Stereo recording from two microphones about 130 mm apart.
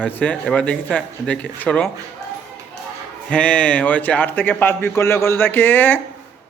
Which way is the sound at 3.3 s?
10° left (ahead or behind).